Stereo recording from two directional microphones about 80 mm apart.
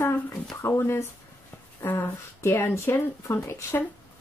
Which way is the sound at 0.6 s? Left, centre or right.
Left.